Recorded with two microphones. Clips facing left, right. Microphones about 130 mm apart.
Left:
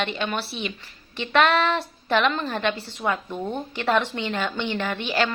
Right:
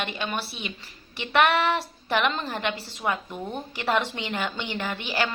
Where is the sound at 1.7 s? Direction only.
15° right (ahead or behind).